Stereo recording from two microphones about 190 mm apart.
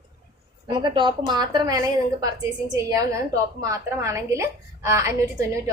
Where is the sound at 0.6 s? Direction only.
25° right (ahead or behind).